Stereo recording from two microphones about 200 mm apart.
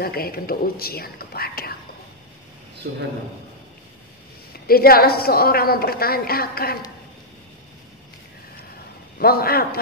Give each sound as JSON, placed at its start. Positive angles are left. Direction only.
{"t": 0.0, "sound": "a woman's voice", "side_deg": 50}
{"t": 2.8, "sound": "a man's voice", "side_deg": -50}
{"t": 4.6, "sound": "a woman's voice", "side_deg": 50}
{"t": 9.2, "sound": "a woman's voice", "side_deg": 50}